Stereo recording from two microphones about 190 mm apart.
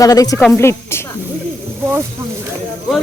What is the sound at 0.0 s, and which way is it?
Speech, 20° left (ahead or behind).